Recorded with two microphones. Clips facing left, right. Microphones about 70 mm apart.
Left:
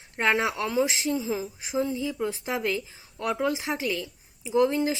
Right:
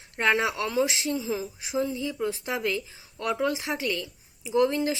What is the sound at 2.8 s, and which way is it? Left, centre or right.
Speech, centre.